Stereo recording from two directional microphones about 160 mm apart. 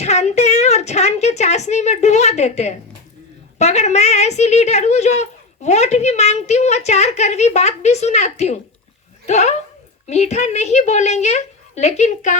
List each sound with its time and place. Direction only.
0.0 s a woman's voice: 45° left (ahead or behind)